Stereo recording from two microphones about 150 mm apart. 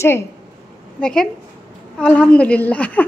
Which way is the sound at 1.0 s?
5° left (ahead or behind).